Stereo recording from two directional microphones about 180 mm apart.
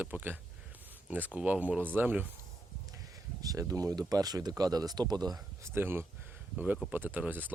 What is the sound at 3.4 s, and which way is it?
Speech, 20° right (ahead or behind).